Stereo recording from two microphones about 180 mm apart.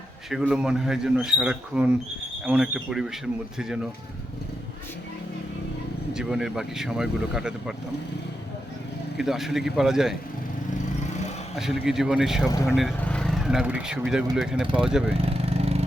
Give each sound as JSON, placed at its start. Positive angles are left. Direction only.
{"t": 0.3, "sound": "speech", "side_deg": -5}
{"t": 6.1, "sound": "speech", "side_deg": -5}
{"t": 9.1, "sound": "speech", "side_deg": 0}
{"t": 11.5, "sound": "speech", "side_deg": 0}
{"t": 15.2, "sound": "vehicle", "side_deg": -35}